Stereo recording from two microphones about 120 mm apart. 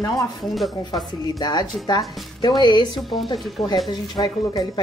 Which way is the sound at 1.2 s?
35° left (ahead or behind).